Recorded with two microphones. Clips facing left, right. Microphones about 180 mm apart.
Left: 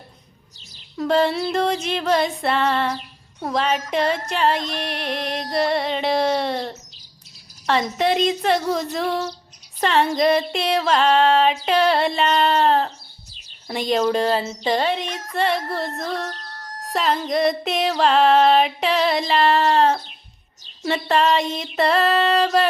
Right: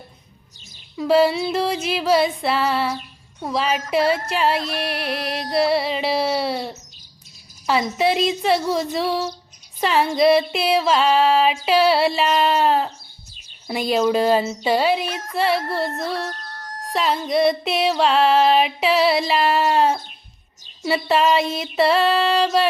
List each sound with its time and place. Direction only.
0.9 s music: 5° right (ahead or behind)
7.9 s music: 5° right (ahead or behind)
13.7 s speech: 5° right (ahead or behind)
15.3 s music: centre (ahead or behind)
16.3 s a sound: 50° right (ahead or behind)
16.9 s music: centre (ahead or behind)